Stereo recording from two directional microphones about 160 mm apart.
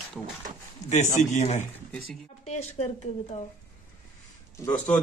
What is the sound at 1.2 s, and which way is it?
Speech, 50° left (ahead or behind).